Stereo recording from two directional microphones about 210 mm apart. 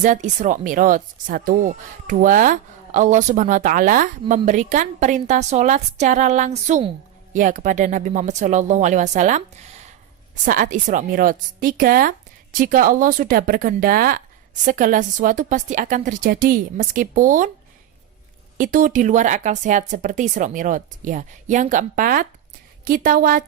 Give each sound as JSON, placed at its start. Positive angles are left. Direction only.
{"t": 0.0, "sound": "speech", "side_deg": -35}
{"t": 18.5, "sound": "a woman's voice", "side_deg": -40}